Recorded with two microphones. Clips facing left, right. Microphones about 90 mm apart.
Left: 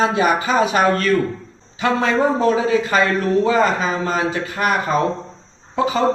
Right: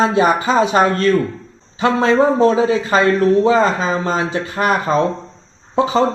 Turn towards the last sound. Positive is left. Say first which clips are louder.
# right 3 dB
turn(degrees=-30)  # may be behind; listen again after turning